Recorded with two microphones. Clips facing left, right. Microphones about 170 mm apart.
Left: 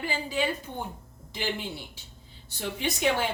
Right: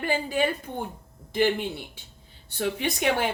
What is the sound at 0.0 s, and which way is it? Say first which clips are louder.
A woman's voice: right 4 dB; 55° right (ahead or behind).